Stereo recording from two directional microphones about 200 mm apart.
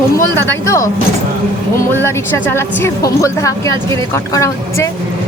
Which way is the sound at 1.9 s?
10° left (ahead or behind).